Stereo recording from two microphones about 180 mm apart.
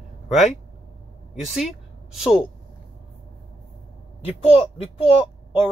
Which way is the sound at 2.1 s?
5° right (ahead or behind).